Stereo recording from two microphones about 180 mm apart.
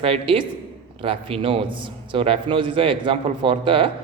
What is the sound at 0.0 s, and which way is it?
A man's voice, 30° right (ahead or behind).